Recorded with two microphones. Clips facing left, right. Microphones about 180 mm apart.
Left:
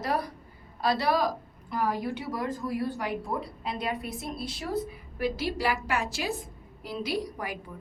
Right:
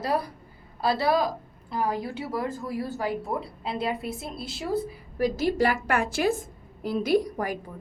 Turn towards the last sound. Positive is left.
turn(degrees=-50)  # may be behind; listen again after turning